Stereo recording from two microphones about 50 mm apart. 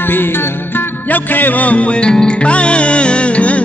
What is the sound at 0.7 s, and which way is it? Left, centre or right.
Music, left.